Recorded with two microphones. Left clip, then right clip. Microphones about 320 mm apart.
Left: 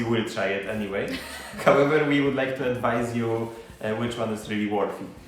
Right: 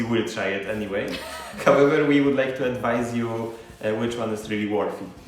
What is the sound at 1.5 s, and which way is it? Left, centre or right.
A man's voice, centre.